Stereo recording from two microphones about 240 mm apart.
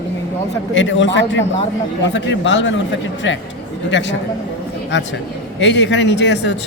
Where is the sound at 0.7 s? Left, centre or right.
Left.